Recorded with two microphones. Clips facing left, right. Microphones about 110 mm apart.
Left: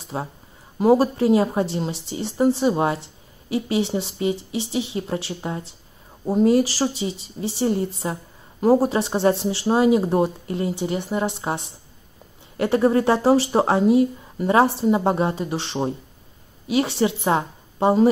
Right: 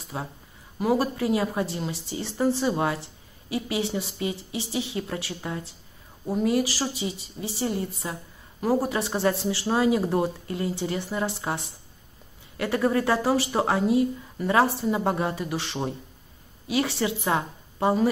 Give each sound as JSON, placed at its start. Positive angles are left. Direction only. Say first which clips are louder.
{"t": 0.1, "sound": "a woman's voice", "louder": "left 5 dB", "side_deg": 30}